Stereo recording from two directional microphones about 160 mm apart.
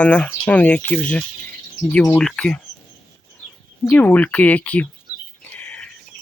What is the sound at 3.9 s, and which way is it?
Speech, 10° left (ahead or behind).